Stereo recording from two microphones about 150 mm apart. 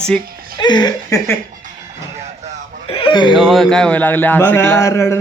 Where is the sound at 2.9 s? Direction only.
35° left (ahead or behind).